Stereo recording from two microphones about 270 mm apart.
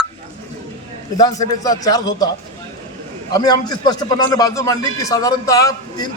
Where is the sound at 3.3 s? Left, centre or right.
Centre.